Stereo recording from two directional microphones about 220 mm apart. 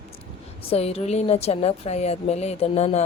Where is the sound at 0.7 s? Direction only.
30° left (ahead or behind).